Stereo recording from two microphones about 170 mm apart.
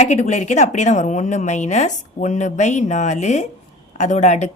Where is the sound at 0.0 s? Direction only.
45° left (ahead or behind).